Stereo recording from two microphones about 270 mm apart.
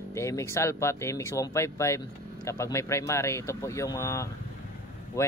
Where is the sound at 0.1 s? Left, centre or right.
Centre.